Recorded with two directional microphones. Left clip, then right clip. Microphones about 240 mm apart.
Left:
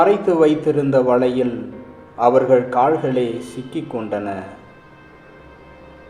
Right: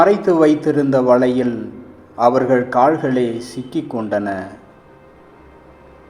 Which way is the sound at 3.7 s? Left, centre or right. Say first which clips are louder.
Right 4 dB; right.